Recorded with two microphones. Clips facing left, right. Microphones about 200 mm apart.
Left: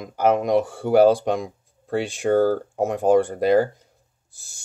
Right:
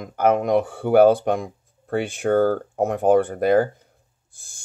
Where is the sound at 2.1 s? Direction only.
Centre (ahead or behind).